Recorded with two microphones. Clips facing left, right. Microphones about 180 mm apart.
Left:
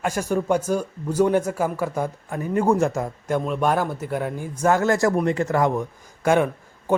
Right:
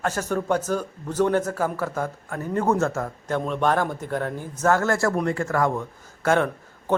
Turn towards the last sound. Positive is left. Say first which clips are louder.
# left 2 dB
turn(degrees=15)  # may be behind; listen again after turning